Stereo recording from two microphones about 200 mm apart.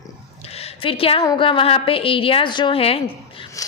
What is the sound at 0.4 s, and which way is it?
A woman's voice, 30° left (ahead or behind).